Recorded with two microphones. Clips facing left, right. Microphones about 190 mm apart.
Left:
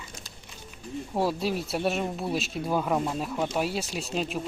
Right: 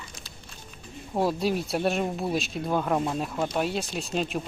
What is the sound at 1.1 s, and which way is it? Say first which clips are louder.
Speech: right 2 dB; centre (ahead or behind).